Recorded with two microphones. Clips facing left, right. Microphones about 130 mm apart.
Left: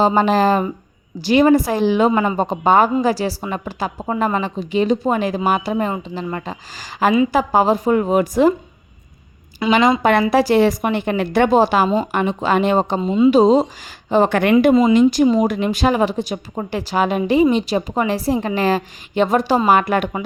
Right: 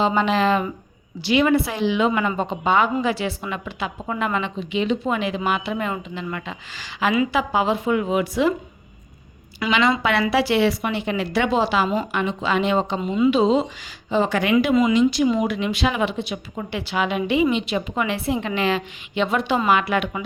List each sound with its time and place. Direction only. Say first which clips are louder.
0.0 s a woman's voice: left 5 dB; 40° left (ahead or behind)
9.6 s speech: left 6 dB; 25° left (ahead or behind)
10.0 s a woman's voice: left 5 dB; 45° left (ahead or behind)
13.0 s speech: left 6 dB; 25° left (ahead or behind)
13.3 s speech: left 7 dB; 40° left (ahead or behind)
14.1 s a woman's voice: left 5 dB; 55° left (ahead or behind)
14.6 s a woman's voice: left 5 dB; 45° left (ahead or behind)